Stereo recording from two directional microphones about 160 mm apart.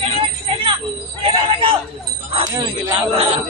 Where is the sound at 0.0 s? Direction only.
35° right (ahead or behind).